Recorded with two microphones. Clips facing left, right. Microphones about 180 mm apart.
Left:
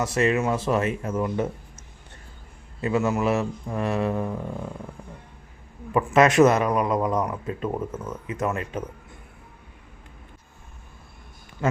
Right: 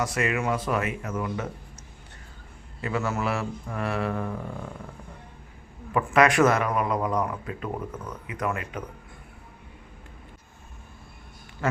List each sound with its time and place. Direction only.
0.0 s speech: 25° left (ahead or behind)
2.8 s speech: 20° left (ahead or behind)
6.1 s speech: 20° left (ahead or behind)
11.6 s speech: 15° left (ahead or behind)